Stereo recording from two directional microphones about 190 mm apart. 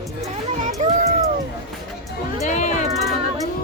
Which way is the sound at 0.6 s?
35° right (ahead or behind).